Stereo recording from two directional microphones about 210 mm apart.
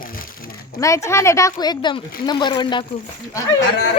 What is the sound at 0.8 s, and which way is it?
Speech, 15° left (ahead or behind).